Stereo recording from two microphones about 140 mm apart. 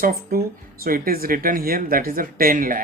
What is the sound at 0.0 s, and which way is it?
Speech, 90° right.